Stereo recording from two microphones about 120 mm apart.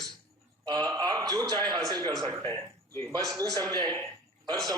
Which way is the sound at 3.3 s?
30° right (ahead or behind).